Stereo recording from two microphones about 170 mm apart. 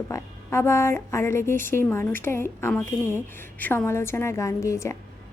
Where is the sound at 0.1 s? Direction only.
15° left (ahead or behind).